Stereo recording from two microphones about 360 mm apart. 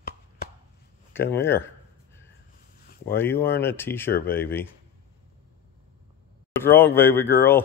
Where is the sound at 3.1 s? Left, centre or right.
Centre.